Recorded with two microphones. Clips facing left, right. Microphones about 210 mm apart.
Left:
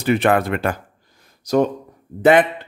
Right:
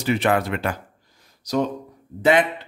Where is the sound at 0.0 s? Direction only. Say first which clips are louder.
Left 4 dB; 55° left (ahead or behind).